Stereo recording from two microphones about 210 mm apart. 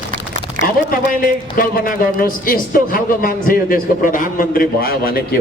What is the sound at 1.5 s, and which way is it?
A man's voice, 40° left (ahead or behind).